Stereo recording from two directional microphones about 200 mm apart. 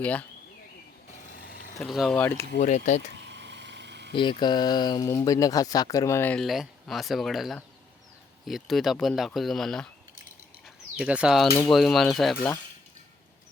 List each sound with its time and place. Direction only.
0.0 s speech: 5° left (ahead or behind)
1.2 s vehicle: 45° left (ahead or behind)
1.8 s speech: centre (ahead or behind)
2.6 s speech: 35° left (ahead or behind)
3.2 s a sound: 60° right (ahead or behind)
4.1 s speech: 25° left (ahead or behind); by 9.9 s centre (ahead or behind)
10.9 s speech: 5° right (ahead or behind)